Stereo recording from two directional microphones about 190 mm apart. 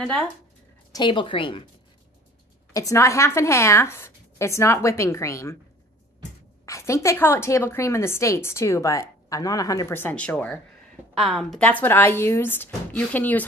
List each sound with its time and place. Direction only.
0.9 s a woman's voice: 25° left (ahead or behind)
2.7 s a woman's voice: 15° left (ahead or behind)
6.6 s a woman's voice: 15° left (ahead or behind)